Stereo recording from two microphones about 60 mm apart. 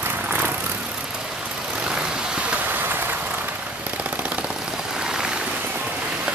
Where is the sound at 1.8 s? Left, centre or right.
Centre.